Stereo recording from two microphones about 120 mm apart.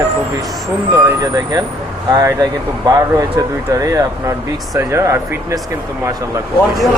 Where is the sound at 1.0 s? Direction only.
30° right (ahead or behind).